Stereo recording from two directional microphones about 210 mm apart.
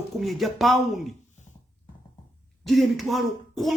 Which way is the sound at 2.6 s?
Centre (ahead or behind).